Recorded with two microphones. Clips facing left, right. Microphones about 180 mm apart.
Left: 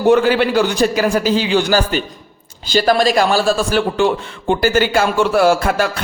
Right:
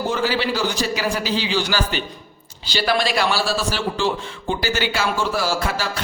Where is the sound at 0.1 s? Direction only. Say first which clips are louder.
Left 13 dB; 55° left (ahead or behind).